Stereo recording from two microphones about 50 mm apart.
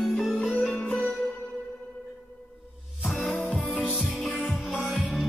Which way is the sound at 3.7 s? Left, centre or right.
Centre.